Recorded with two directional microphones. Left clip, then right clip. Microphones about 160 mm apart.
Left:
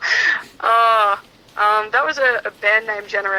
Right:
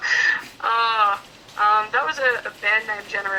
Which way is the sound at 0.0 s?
50° left (ahead or behind).